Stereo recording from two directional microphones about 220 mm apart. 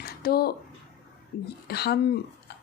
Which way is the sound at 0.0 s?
45° left (ahead or behind).